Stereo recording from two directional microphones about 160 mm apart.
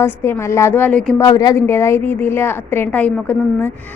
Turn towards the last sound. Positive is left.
turn(degrees=10)  # may be behind; listen again after turning